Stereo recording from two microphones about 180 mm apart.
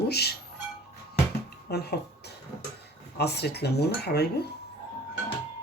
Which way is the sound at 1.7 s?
65° left (ahead or behind).